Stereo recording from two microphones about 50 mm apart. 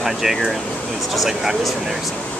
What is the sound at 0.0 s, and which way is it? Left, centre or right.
Speech, centre.